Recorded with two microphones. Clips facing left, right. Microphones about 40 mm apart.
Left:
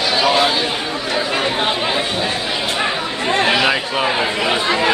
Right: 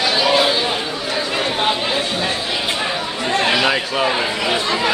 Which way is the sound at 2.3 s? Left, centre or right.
Centre.